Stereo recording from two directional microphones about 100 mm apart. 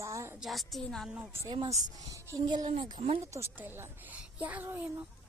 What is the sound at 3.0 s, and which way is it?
Speech, 85° right.